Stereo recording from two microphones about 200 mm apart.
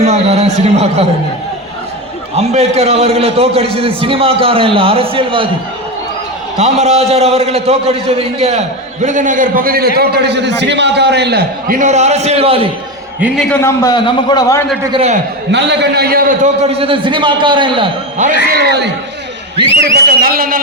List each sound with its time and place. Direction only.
0.0 s a sound: 30° right (ahead or behind)
2.3 s a man's voice: 30° right (ahead or behind)
6.6 s a man's voice: 35° right (ahead or behind)
13.1 s a man's voice: 5° right (ahead or behind)
13.5 s a man's voice: 15° left (ahead or behind)
14.9 s a man's voice: 35° right (ahead or behind)
15.5 s a man's voice: 60° right (ahead or behind)
16.6 s a man's voice: 30° right (ahead or behind)
18.5 s a man's voice: 55° right (ahead or behind)
19.8 s a man's voice: 50° right (ahead or behind)